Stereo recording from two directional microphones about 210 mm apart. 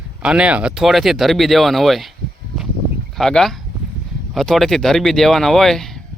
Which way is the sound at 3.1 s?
Centre (ahead or behind).